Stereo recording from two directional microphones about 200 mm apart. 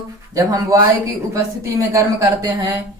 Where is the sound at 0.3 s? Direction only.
15° right (ahead or behind).